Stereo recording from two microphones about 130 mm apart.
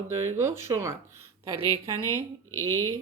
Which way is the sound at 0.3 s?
20° right (ahead or behind).